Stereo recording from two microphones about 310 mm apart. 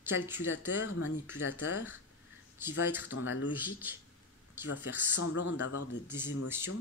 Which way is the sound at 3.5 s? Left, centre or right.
Centre.